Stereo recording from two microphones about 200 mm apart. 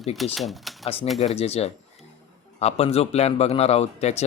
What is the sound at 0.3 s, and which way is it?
Speech, centre (ahead or behind).